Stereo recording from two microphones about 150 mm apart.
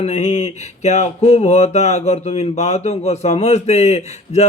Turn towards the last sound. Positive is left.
turn(degrees=45)  # may be behind; listen again after turning